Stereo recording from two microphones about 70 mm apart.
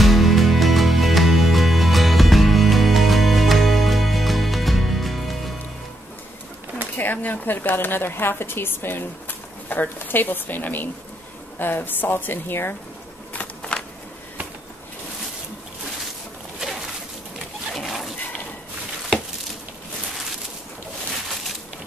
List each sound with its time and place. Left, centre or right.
0.0 s music: centre
7.0 s a woman's voice: left
13.3 s a sound: centre
16.5 s pigeon: centre
17.7 s dog: centre